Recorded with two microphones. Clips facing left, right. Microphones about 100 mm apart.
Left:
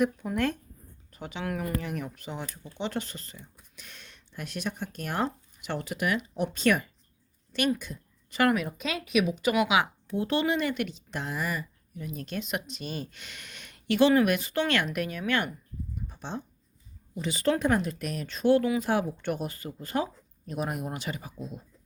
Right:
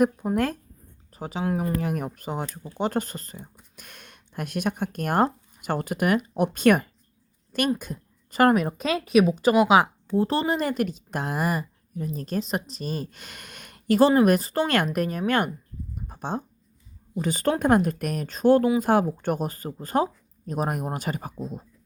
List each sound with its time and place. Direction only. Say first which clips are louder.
0.0 s speech: right 4 dB; 40° right (ahead or behind)
1.9 s speech: right 6 dB; 45° right (ahead or behind)
16.0 s a sound: right 7 dB; 50° right (ahead or behind)
17.2 s speech: right 3 dB; 45° right (ahead or behind)